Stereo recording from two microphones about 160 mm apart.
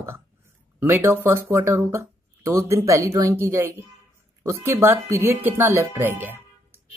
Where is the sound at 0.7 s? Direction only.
15° right (ahead or behind).